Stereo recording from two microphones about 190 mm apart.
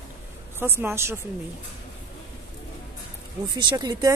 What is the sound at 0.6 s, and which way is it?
Speech, 10° right (ahead or behind).